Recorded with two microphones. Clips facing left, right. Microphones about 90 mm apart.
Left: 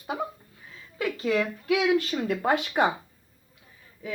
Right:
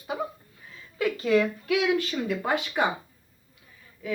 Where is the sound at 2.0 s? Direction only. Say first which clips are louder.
Left 1 dB; 45° left (ahead or behind).